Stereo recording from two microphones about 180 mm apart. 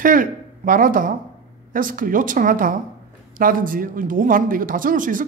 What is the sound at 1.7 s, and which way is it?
A woman's voice, 50° right (ahead or behind).